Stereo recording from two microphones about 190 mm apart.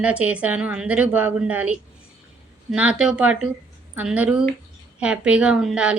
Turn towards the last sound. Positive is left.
turn(degrees=-5)  # may be behind; listen again after turning